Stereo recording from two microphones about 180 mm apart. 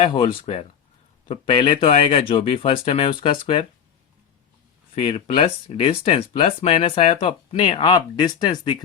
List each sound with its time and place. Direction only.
0.0 s speech: 25° left (ahead or behind)
4.9 s speech: 35° left (ahead or behind)